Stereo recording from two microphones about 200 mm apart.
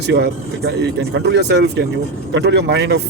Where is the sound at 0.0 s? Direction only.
55° right (ahead or behind).